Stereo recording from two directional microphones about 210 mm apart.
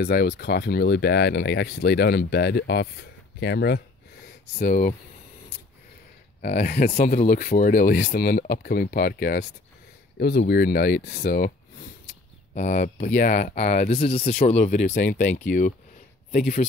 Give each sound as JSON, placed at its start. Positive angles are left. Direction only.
{"t": 0.0, "sound": "speech", "side_deg": 50}
{"t": 4.6, "sound": "speech", "side_deg": 40}
{"t": 6.4, "sound": "speech", "side_deg": 50}
{"t": 7.0, "sound": "speech", "side_deg": 35}
{"t": 12.5, "sound": "speech", "side_deg": 35}